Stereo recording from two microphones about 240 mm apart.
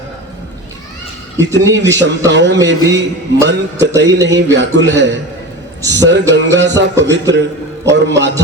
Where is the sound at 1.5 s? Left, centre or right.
Right.